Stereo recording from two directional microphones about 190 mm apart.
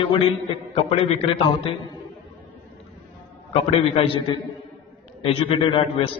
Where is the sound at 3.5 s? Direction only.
30° left (ahead or behind).